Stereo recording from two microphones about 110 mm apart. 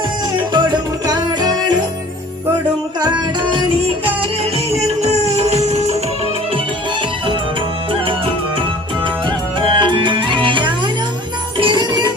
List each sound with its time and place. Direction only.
0.5 s music: 40° right (ahead or behind)
4.2 s music: 70° right (ahead or behind)
9.7 s music: 45° right (ahead or behind)